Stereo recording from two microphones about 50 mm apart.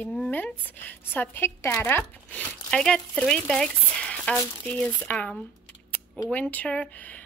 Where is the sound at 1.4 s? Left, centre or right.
Left.